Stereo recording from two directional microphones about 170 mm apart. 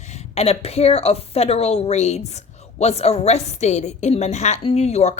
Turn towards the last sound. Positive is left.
turn(degrees=40)  # may be behind; listen again after turning